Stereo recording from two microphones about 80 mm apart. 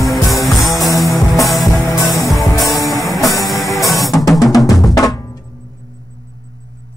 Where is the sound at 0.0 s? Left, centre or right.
Centre.